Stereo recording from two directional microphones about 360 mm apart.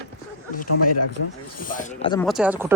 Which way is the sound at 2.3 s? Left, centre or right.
Centre.